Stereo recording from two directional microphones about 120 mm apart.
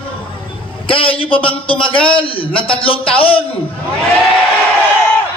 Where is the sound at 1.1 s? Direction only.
50° left (ahead or behind).